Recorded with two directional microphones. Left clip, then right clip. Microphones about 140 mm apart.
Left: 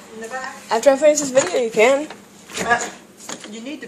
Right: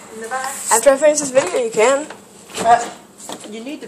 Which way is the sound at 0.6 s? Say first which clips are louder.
Right 1 dB; 30° left (ahead or behind).